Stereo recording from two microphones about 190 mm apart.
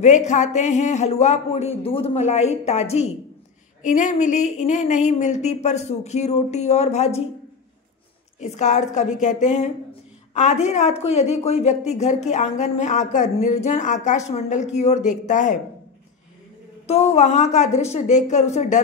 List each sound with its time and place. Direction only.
0.0 s speech: 40° left (ahead or behind)
8.4 s speech: 35° left (ahead or behind)
16.8 s speech: 35° left (ahead or behind)